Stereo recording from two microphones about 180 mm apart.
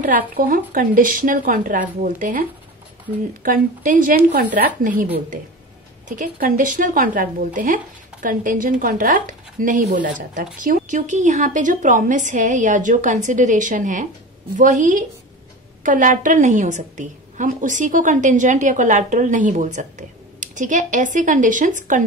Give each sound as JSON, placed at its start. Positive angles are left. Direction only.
{"t": 0.0, "sound": "a woman's voice", "side_deg": -50}
{"t": 3.4, "sound": "a woman's voice", "side_deg": -50}
{"t": 6.0, "sound": "a woman's voice", "side_deg": -50}